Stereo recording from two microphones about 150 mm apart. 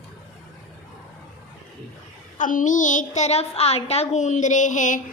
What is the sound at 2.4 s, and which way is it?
A child's voice, 60° left (ahead or behind).